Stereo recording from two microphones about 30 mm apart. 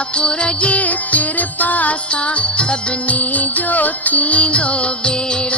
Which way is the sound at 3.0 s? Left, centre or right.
Left.